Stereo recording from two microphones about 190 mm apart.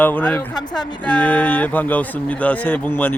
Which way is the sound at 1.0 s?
5° left (ahead or behind).